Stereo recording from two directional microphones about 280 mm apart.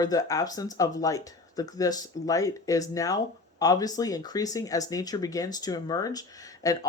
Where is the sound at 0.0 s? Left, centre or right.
Centre.